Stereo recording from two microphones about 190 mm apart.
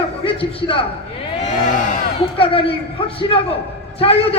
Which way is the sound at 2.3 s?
30° left (ahead or behind).